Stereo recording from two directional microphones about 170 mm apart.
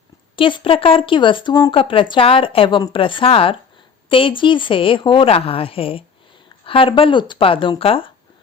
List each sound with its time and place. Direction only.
0.3 s a woman's voice: 30° left (ahead or behind)